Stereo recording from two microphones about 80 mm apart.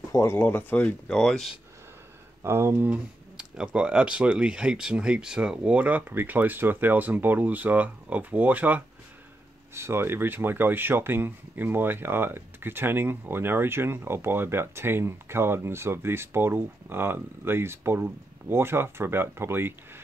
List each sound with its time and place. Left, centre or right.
0.1 s speech: left
0.4 s speech: left
1.0 s speech: centre
2.4 s speech: right
2.9 s speech: centre
9.8 s speech: right